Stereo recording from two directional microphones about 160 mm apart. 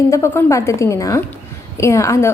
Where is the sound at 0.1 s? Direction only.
15° left (ahead or behind).